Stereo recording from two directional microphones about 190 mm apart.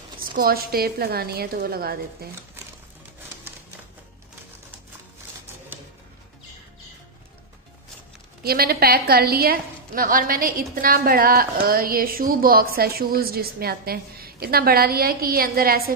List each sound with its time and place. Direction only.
0.4 s a woman's voice: 50° right (ahead or behind)
8.4 s a woman's voice: 55° right (ahead or behind)